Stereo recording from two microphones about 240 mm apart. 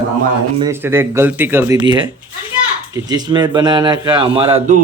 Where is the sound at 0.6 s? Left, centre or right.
Centre.